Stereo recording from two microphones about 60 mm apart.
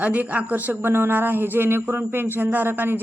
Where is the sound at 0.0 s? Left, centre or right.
Right.